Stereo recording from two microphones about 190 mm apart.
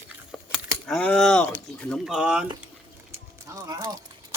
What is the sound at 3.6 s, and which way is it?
Speech, 20° right (ahead or behind).